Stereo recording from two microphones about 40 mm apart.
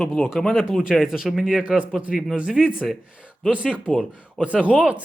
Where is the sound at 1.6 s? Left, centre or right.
Right.